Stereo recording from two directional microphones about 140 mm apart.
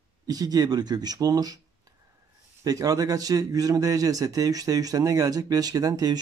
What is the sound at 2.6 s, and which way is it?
A man's voice, 25° right (ahead or behind).